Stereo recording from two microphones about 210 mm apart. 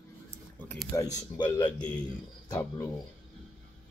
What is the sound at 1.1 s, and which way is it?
Speech, 20° left (ahead or behind).